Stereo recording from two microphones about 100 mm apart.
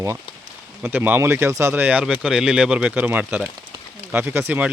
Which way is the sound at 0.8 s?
20° right (ahead or behind).